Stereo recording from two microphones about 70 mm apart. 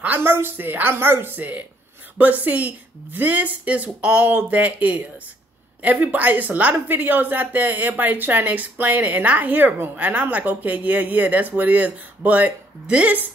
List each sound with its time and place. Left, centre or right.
0.0 s a woman's voice: right